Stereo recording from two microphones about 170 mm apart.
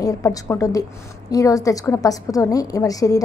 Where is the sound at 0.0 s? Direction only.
20° left (ahead or behind).